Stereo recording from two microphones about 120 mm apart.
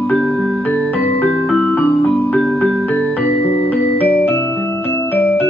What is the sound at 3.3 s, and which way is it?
Music, 55° left (ahead or behind).